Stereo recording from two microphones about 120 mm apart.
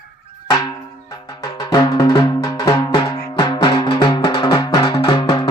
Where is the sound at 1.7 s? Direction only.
35° left (ahead or behind).